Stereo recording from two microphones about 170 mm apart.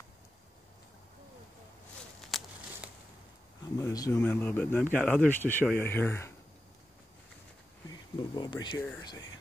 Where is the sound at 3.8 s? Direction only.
20° left (ahead or behind).